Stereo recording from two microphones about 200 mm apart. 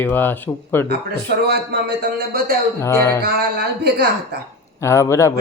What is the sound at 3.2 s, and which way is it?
A woman's voice, 50° right (ahead or behind).